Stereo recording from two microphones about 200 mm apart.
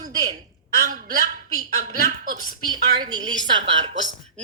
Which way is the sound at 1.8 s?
40° right (ahead or behind).